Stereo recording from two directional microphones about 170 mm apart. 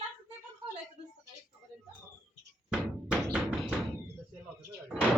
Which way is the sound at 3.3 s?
5° right (ahead or behind).